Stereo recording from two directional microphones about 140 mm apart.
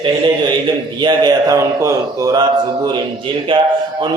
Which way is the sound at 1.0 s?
30° right (ahead or behind).